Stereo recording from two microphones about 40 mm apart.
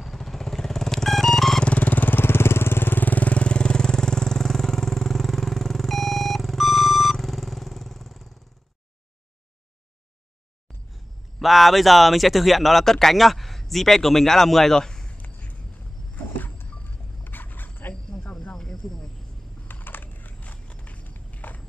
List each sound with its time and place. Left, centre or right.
0.0 s vehicle: centre
1.6 s vehicle: left
3.3 s vehicle: left; by 8.3 s centre
11.4 s speech: centre
16.3 s music: left
17.2 s a sound: left
18.4 s snake: centre
19.7 s walk: left